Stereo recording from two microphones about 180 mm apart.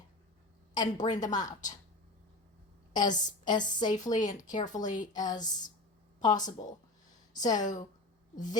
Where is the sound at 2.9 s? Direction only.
45° left (ahead or behind).